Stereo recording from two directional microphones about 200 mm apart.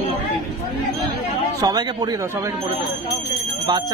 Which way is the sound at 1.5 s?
20° right (ahead or behind).